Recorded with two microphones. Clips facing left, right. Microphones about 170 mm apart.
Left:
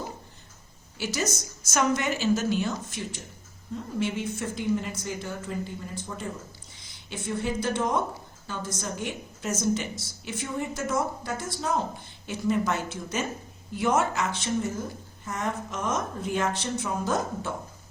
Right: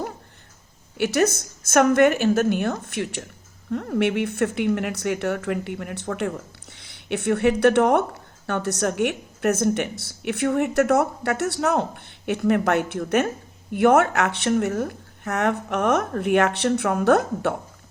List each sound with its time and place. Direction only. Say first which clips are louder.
0.9 s a woman's voice: right 9 dB; 60° right (ahead or behind)